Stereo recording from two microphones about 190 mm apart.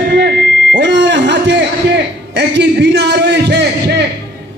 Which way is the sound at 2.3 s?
65° right (ahead or behind).